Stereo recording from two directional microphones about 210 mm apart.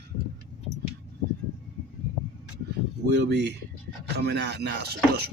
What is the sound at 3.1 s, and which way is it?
Speech, 55° right (ahead or behind).